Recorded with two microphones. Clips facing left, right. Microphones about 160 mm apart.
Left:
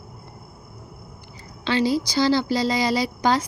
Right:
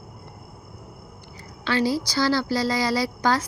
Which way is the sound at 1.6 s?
20° left (ahead or behind).